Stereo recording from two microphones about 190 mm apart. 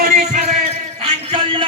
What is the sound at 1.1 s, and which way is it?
Music, 25° right (ahead or behind).